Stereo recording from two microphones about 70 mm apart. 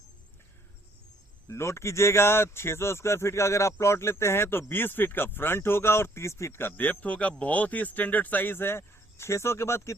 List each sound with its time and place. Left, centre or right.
1.5 s speech: left